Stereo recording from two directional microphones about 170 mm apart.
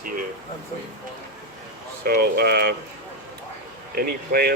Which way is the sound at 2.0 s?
65° right (ahead or behind).